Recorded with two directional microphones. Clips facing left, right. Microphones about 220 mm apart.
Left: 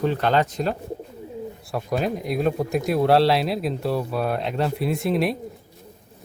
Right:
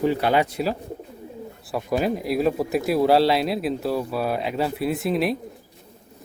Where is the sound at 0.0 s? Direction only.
10° right (ahead or behind).